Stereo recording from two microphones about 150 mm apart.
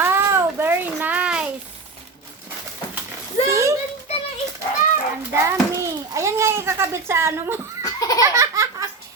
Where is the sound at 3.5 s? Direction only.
20° right (ahead or behind).